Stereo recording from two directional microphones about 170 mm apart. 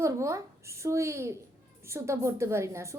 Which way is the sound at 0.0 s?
15° right (ahead or behind).